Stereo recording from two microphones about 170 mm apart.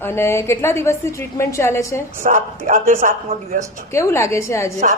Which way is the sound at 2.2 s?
50° right (ahead or behind).